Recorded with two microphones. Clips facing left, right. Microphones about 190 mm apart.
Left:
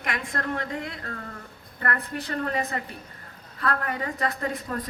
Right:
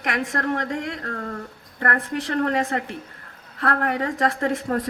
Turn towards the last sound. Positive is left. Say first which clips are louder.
# right 6 dB
turn(degrees=-80)